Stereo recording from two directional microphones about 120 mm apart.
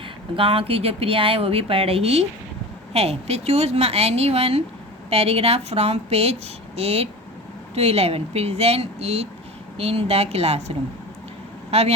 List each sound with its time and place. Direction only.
0.3 s speech: 50° right (ahead or behind)